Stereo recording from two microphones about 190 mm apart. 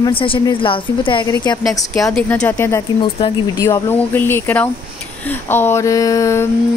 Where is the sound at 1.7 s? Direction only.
20° left (ahead or behind).